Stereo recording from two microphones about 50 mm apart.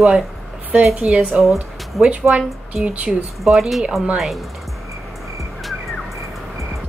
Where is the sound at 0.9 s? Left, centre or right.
Centre.